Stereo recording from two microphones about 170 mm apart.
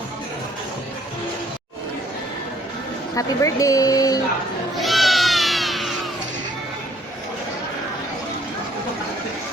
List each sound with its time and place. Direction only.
3.2 s speech: 20° left (ahead or behind)
4.8 s cat: centre (ahead or behind)